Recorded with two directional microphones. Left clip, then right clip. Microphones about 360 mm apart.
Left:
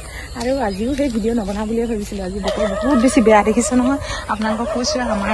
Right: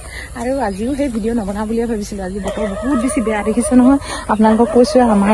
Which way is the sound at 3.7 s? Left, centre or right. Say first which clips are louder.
Right 6 dB; centre.